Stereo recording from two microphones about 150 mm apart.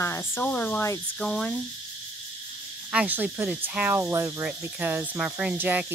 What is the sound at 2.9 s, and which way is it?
Cricket, 10° right (ahead or behind).